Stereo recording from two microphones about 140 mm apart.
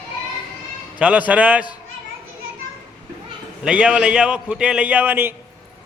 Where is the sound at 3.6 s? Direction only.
5° right (ahead or behind).